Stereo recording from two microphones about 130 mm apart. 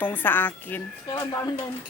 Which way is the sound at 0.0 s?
15° left (ahead or behind).